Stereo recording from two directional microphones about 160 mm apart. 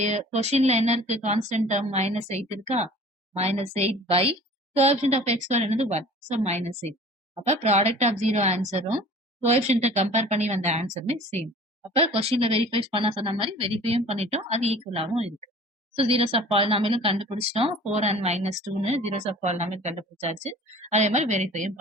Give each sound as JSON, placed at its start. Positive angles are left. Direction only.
{"t": 0.0, "sound": "speech", "side_deg": -45}
{"t": 10.8, "sound": "a woman's voice", "side_deg": 15}
{"t": 11.9, "sound": "speech", "side_deg": -40}